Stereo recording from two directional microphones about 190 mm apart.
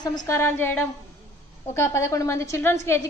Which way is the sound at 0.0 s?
20° left (ahead or behind).